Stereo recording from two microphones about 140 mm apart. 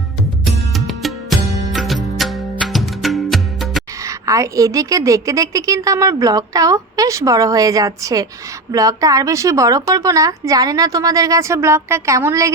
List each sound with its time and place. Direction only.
0.4 s music: centre (ahead or behind)
4.0 s a woman's voice: 20° right (ahead or behind)